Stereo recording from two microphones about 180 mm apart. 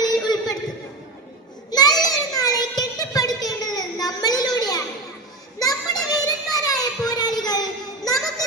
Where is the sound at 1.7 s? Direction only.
20° left (ahead or behind).